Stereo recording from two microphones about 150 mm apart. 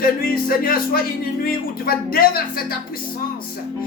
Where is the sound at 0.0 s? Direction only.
80° left.